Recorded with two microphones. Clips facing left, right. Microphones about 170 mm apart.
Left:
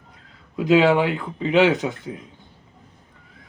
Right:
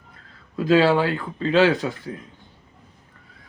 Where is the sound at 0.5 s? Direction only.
20° left (ahead or behind).